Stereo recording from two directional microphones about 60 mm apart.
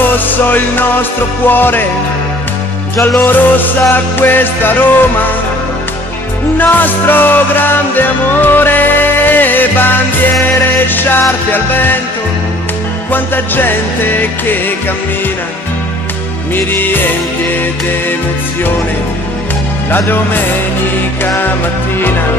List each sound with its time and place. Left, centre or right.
0.1 s music: left
3.2 s music: left
6.6 s music: left
13.1 s music: left
16.5 s music: left
19.9 s music: left